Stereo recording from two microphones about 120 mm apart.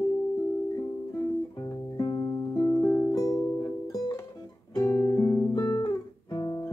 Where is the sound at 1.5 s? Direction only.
30° left (ahead or behind).